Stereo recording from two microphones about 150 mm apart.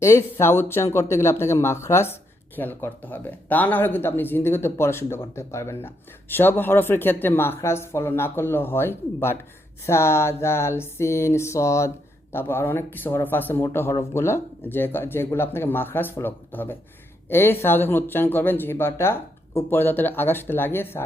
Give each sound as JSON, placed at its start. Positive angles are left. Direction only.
{"t": 0.0, "sound": "speech", "side_deg": 20}